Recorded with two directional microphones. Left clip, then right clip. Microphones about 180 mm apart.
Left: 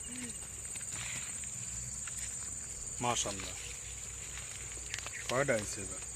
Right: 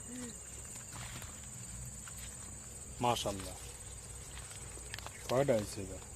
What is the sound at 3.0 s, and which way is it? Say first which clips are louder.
Speech: right 1 dB; 30° right (ahead or behind).